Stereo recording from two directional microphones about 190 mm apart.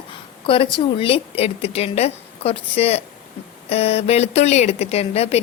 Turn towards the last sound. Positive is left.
turn(degrees=35)  # may be behind; listen again after turning